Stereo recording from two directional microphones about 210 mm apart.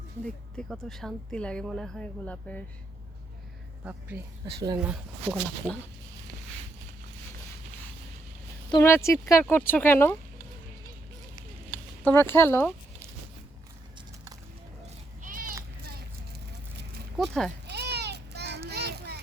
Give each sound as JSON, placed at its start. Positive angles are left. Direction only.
{"t": 0.5, "sound": "speech", "side_deg": 0}
{"t": 4.8, "sound": "speech", "side_deg": -5}
{"t": 8.7, "sound": "speech", "side_deg": 10}
{"t": 12.0, "sound": "speech", "side_deg": 10}
{"t": 15.2, "sound": "a sound", "side_deg": -40}
{"t": 15.8, "sound": "vehicle", "side_deg": -50}
{"t": 17.2, "sound": "speech", "side_deg": 0}
{"t": 17.7, "sound": "a sound", "side_deg": -50}
{"t": 18.7, "sound": "children playing", "side_deg": -50}